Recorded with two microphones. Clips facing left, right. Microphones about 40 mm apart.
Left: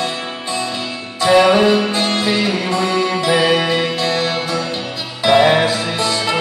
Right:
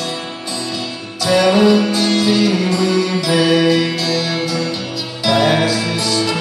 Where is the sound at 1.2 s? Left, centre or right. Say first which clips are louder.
Left 1 dB; left.